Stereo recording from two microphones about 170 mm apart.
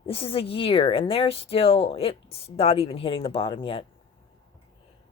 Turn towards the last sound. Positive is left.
turn(degrees=30)  # may be behind; listen again after turning